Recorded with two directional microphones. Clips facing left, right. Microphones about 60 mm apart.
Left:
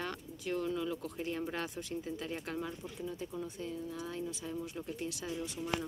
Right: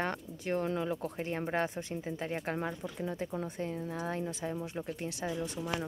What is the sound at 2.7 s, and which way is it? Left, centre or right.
Speech, right.